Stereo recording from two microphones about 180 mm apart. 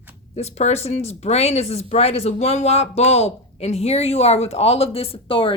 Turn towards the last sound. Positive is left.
turn(degrees=30)  # may be behind; listen again after turning